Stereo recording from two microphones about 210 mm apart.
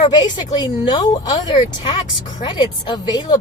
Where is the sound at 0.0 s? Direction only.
20° left (ahead or behind).